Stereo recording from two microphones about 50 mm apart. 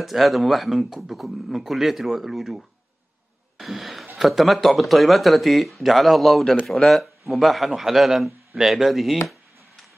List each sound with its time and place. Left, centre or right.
0.0 s speech: centre